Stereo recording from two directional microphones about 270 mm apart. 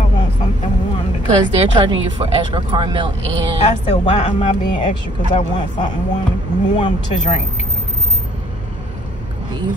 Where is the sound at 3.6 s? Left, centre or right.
Left.